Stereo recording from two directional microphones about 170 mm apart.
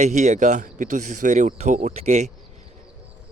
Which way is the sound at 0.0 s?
45° right (ahead or behind).